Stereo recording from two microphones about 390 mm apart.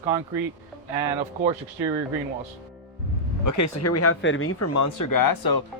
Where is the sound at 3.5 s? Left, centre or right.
Left.